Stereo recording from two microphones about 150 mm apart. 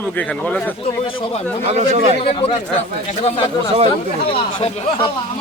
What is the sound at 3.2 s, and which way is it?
A man's voice, 40° left (ahead or behind).